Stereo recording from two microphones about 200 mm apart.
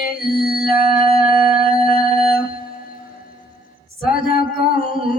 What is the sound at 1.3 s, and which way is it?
Music, 45° left (ahead or behind).